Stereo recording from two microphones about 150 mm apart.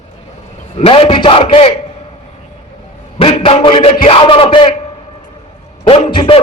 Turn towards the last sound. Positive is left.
turn(degrees=35)  # may be behind; listen again after turning